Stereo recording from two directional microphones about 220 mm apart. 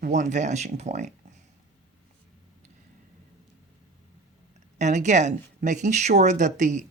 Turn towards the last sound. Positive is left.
turn(degrees=-35)  # may be behind; listen again after turning